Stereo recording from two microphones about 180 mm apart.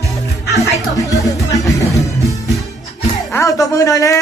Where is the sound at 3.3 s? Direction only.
20° left (ahead or behind).